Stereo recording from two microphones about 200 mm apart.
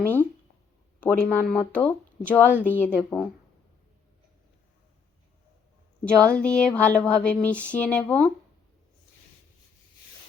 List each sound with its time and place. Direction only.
0.0 s a sound: 10° left (ahead or behind)
0.9 s speech: 5° left (ahead or behind)
6.1 s speech: 5° left (ahead or behind)